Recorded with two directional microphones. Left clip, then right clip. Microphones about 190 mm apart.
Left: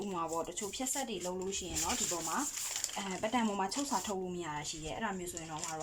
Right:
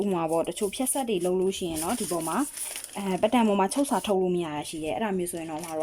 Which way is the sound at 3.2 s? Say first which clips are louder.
Right 11 dB; 70° right (ahead or behind).